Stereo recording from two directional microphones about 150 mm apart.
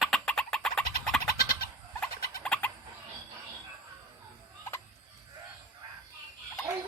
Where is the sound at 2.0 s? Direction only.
10° left (ahead or behind).